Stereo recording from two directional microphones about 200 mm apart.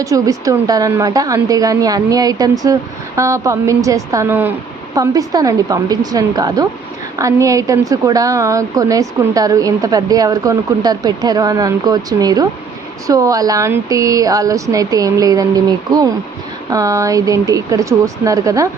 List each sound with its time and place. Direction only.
0.0 s a woman's voice: 15° right (ahead or behind)